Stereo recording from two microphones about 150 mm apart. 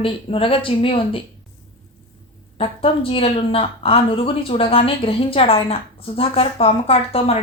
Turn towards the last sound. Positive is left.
turn(degrees=40)  # may be behind; listen again after turning